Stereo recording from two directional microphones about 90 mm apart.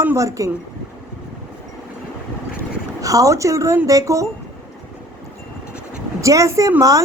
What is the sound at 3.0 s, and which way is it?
A woman's voice, 40° right (ahead or behind).